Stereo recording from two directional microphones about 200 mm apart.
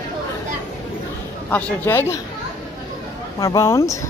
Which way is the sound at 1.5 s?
10° left (ahead or behind).